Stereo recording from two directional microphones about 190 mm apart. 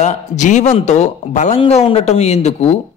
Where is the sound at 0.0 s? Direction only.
35° left (ahead or behind).